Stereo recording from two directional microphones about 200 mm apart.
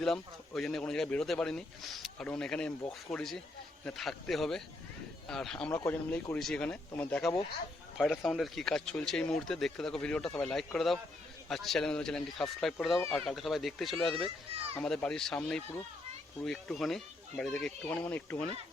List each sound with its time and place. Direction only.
0.0 s speech: centre (ahead or behind)